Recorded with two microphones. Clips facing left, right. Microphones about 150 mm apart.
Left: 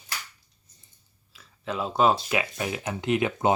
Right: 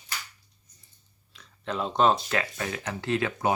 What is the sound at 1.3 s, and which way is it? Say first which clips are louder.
Speech: even; 5° left (ahead or behind).